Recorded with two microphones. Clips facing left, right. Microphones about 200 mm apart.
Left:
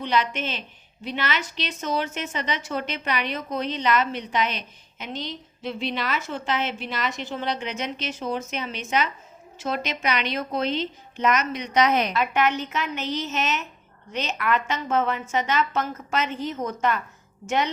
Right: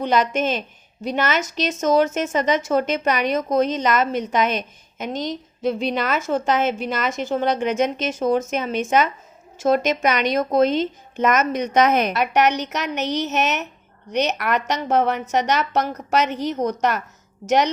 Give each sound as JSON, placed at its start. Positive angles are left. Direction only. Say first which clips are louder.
{"t": 0.0, "sound": "a woman's voice", "louder": "right 6 dB", "side_deg": -45}
{"t": 12.1, "sound": "a woman's voice", "louder": "right 4 dB", "side_deg": -70}
{"t": 15.9, "sound": "a woman's voice", "louder": "right 4 dB", "side_deg": -40}
{"t": 16.1, "sound": "a woman's voice", "louder": "right 6 dB", "side_deg": -70}